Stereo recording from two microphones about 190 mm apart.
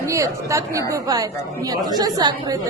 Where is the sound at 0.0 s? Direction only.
15° right (ahead or behind).